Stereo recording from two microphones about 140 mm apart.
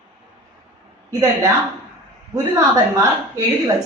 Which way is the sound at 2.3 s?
25° right (ahead or behind).